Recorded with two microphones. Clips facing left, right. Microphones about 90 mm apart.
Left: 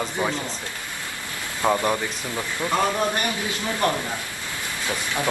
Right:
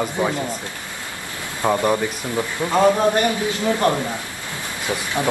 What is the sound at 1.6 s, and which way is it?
Speech, 15° right (ahead or behind).